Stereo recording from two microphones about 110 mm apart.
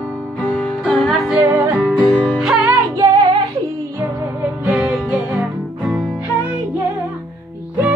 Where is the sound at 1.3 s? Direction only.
15° right (ahead or behind).